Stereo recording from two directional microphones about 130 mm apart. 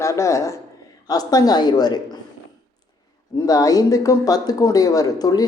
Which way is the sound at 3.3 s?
25° left (ahead or behind).